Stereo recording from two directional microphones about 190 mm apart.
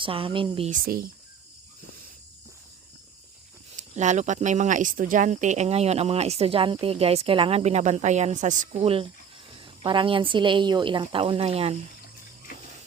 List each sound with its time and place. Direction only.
0.0 s speech: 30° right (ahead or behind)
0.7 s speech: 50° right (ahead or behind)
3.8 s speech: 40° right (ahead or behind)